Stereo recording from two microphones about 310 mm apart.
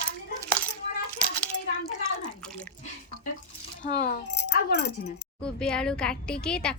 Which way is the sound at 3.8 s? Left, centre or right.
Left.